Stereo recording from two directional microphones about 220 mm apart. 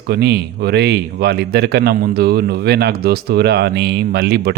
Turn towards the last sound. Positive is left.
turn(degrees=-45)  # may be behind; listen again after turning